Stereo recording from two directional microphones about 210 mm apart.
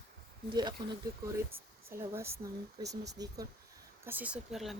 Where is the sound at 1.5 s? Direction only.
10° right (ahead or behind).